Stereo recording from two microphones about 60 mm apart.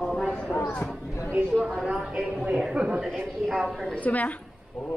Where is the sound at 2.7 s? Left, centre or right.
Centre.